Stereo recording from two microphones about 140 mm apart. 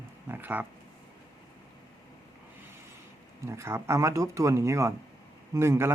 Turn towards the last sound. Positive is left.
turn(degrees=-20)  # may be behind; listen again after turning